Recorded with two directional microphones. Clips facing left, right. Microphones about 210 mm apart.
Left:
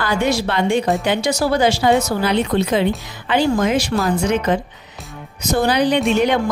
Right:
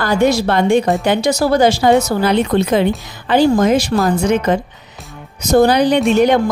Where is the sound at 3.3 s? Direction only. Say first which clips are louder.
Right 5 dB; 40° right (ahead or behind).